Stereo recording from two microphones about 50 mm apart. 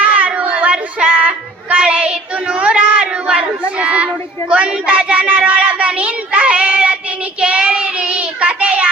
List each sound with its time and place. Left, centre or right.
0.0 s a sound: right
3.8 s speech: right
7.4 s child singing: right